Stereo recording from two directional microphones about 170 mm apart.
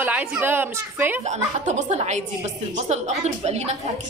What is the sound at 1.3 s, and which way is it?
A woman's voice, 45° right (ahead or behind).